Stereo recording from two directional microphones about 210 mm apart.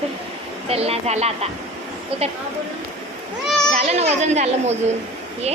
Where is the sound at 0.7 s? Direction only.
30° right (ahead or behind).